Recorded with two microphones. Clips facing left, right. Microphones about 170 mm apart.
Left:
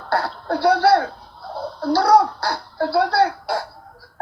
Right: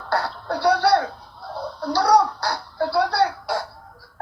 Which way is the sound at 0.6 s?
30° left (ahead or behind).